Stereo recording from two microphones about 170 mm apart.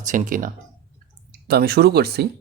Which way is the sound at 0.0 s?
50° right (ahead or behind).